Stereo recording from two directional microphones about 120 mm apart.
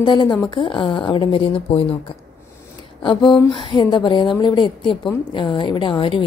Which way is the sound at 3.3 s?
40° left (ahead or behind).